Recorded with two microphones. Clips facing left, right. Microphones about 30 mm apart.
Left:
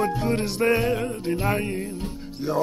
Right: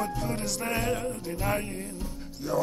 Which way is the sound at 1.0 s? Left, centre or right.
Left.